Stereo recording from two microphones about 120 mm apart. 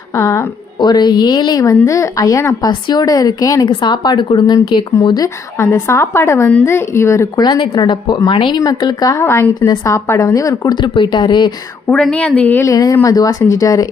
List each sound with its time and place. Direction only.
0.2 s speech: 25° left (ahead or behind)
0.8 s speech: 35° left (ahead or behind)
5.5 s speech: 25° left (ahead or behind)
7.4 s speech: 40° left (ahead or behind)
9.2 s speech: 20° left (ahead or behind)
10.8 s speech: 40° left (ahead or behind)
11.9 s a woman's voice: 5° left (ahead or behind)
12.6 s speech: 30° left (ahead or behind)